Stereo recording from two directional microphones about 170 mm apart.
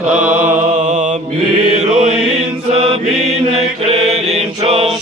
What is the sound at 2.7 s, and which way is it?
Mantra, 35° right (ahead or behind).